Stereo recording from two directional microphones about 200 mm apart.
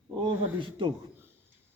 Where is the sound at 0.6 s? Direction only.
25° right (ahead or behind).